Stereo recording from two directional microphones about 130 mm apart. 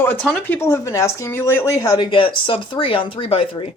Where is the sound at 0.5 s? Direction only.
20° left (ahead or behind).